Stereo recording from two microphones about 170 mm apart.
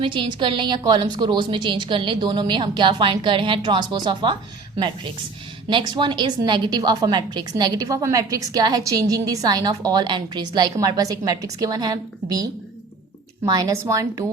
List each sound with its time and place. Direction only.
0.0 s a woman's voice: 30° right (ahead or behind)
5.6 s a woman's voice: 25° right (ahead or behind)